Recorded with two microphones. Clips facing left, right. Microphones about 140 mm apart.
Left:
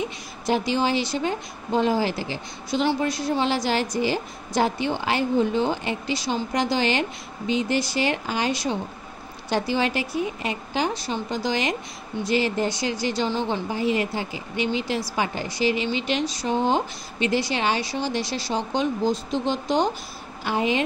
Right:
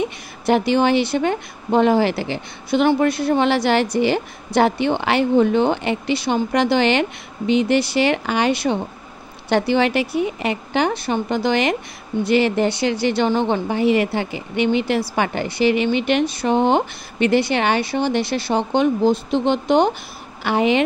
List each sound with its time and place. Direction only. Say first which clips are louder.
0.5 s speech: right 6 dB; 60° right (ahead or behind)